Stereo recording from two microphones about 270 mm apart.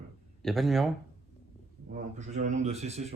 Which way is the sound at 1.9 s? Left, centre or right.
Right.